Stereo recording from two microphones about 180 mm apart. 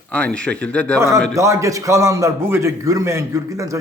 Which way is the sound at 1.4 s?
15° right (ahead or behind).